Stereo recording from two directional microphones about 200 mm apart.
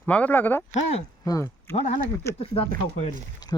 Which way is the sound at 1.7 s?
35° left (ahead or behind).